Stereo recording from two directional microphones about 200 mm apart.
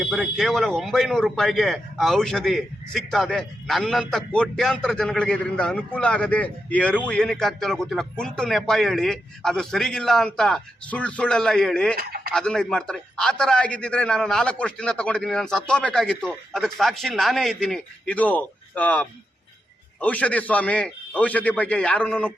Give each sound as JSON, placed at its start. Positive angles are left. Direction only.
{"t": 0.0, "sound": "speech", "side_deg": 0}
{"t": 11.9, "sound": "speech", "side_deg": -50}
{"t": 12.3, "sound": "a man's voice", "side_deg": 5}